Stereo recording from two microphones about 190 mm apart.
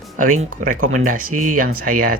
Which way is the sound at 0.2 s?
45° right (ahead or behind).